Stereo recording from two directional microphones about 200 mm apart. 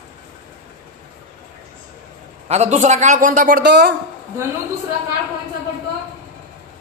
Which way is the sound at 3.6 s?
60° right (ahead or behind).